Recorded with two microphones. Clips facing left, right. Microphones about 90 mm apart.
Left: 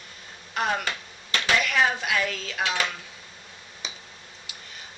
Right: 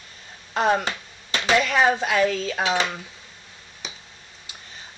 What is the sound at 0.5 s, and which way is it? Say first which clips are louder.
Speech: right 6 dB; 30° right (ahead or behind).